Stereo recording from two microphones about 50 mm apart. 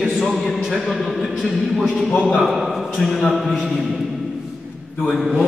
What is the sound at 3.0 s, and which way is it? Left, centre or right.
Speech, centre.